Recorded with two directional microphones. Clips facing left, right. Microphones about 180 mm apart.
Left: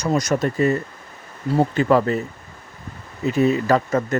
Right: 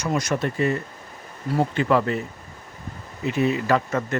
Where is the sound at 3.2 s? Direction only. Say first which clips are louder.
Left 4 dB; 40° left (ahead or behind).